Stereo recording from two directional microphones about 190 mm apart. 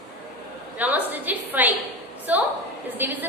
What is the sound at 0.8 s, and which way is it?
A woman's voice, 10° right (ahead or behind).